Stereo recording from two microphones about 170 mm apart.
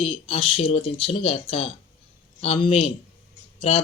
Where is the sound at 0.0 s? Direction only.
35° left (ahead or behind).